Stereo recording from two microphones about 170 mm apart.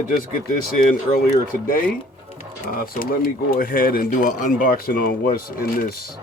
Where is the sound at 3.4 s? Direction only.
60° left (ahead or behind).